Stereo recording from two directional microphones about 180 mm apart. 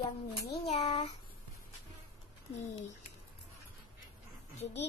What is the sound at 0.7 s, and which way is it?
Child singing, 30° left (ahead or behind).